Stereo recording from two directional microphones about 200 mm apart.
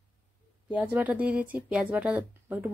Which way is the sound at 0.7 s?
10° right (ahead or behind).